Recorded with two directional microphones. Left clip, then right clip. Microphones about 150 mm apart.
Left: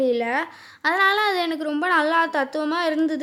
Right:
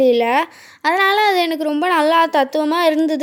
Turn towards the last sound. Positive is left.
turn(degrees=-25)  # may be behind; listen again after turning